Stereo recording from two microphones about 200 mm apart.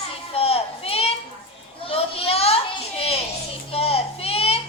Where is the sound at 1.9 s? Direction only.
30° left (ahead or behind).